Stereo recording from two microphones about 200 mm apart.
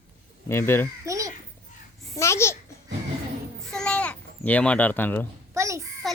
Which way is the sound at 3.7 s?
5° left (ahead or behind).